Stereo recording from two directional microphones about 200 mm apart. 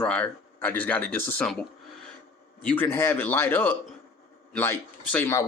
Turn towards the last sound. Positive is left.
turn(degrees=10)  # may be behind; listen again after turning